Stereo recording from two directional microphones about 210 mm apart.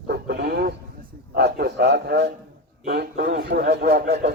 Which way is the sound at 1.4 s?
50° right (ahead or behind).